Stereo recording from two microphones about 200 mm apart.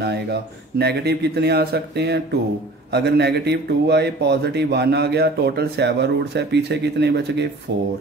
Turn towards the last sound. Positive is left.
turn(degrees=-55)  # may be behind; listen again after turning